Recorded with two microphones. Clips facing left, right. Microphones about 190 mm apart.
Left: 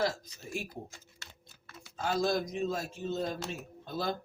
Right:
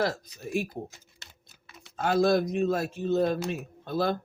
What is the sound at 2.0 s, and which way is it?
Speech, 60° right (ahead or behind).